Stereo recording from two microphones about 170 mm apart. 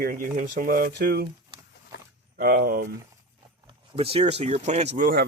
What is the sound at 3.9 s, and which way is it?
Speech, 35° right (ahead or behind).